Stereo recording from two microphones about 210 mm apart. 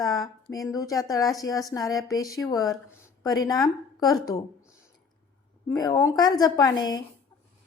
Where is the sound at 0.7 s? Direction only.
15° left (ahead or behind).